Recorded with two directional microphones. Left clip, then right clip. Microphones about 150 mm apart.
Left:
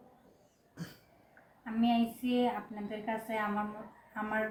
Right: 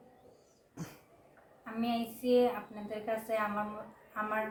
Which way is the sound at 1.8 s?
30° right (ahead or behind).